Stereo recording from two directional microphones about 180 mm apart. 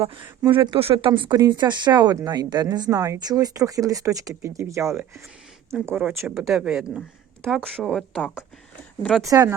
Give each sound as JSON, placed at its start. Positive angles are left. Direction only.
{"t": 0.0, "sound": "speech", "side_deg": -30}
{"t": 9.2, "sound": "speech", "side_deg": -20}